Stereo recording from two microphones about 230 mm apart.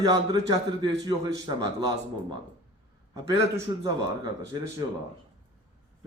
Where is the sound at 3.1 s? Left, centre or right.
Centre.